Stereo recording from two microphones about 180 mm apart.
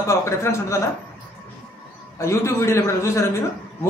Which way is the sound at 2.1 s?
15° left (ahead or behind).